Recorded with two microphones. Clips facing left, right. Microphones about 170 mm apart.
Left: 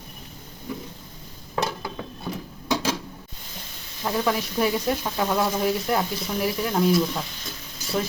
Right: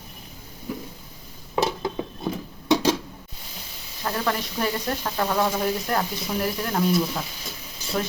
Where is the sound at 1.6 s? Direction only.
20° right (ahead or behind).